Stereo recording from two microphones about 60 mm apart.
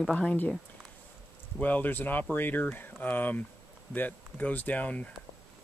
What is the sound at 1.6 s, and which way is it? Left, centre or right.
Speech, left.